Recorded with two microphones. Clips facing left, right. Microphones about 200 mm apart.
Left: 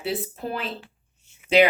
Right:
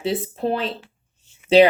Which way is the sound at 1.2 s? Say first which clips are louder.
Right 5 dB; 30° right (ahead or behind).